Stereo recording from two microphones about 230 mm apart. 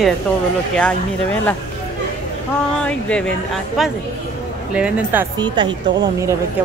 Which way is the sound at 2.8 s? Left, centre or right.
Centre.